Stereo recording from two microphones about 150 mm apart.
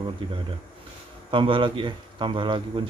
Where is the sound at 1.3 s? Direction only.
35° right (ahead or behind).